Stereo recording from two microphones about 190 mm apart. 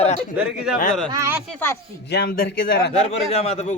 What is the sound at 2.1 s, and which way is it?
Speech, 60° left (ahead or behind).